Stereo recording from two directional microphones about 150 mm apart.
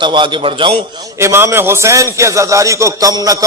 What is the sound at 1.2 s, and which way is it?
A man's voice, 20° right (ahead or behind).